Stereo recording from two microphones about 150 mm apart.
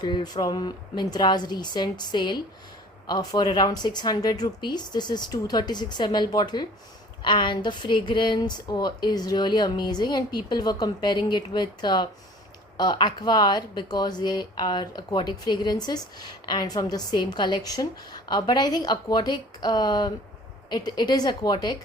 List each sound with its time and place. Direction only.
0.0 s speech: 30° left (ahead or behind)